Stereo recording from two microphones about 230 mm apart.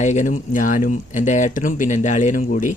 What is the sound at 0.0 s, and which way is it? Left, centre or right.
Speech, left.